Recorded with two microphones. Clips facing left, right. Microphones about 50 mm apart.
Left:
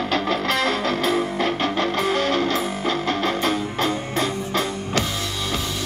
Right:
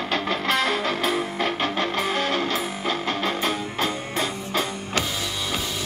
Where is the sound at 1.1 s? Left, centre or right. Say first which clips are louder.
Left 3 dB; centre.